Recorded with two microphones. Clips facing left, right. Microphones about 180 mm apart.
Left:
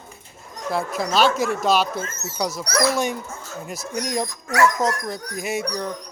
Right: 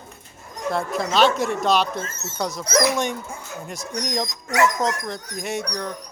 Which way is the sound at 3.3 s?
15° right (ahead or behind).